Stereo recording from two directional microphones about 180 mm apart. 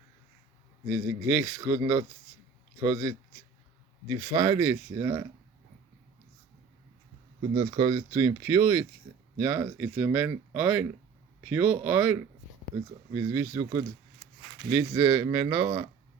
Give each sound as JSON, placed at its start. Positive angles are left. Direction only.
{"t": 0.9, "sound": "speech", "side_deg": -20}
{"t": 4.4, "sound": "speech", "side_deg": -20}
{"t": 7.5, "sound": "speech", "side_deg": -30}
{"t": 13.5, "sound": "speech", "side_deg": -25}